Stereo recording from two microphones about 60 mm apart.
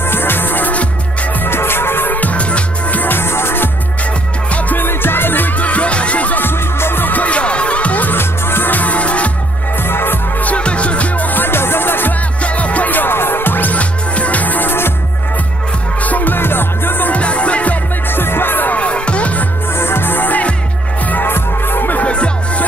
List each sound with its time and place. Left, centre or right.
0.0 s music: left
4.5 s music: left
6.4 s music: left
8.2 s music: left
9.8 s music: left
10.4 s music: left
12.4 s music: left
16.0 s music: left
17.2 s music: left
18.1 s music: left
19.7 s music: left
22.0 s music: centre